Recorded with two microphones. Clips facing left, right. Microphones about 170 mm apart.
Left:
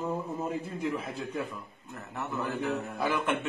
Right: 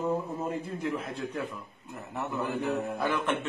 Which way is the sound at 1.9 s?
15° right (ahead or behind).